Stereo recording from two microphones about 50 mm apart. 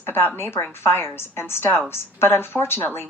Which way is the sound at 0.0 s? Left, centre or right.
Left.